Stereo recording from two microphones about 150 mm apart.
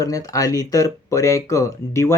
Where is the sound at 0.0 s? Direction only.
20° left (ahead or behind).